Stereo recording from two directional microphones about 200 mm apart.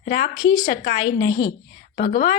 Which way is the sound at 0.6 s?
45° left (ahead or behind).